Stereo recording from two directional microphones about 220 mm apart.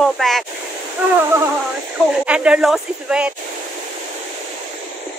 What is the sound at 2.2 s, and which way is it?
Speech, 5° right (ahead or behind).